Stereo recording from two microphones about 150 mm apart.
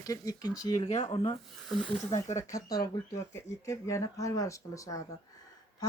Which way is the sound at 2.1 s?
50° left (ahead or behind).